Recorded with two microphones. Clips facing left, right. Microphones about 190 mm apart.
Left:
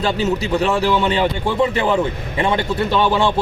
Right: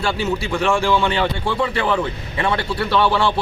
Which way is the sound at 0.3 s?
40° left (ahead or behind).